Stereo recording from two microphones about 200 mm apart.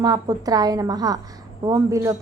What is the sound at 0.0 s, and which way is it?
A woman's voice, 20° right (ahead or behind).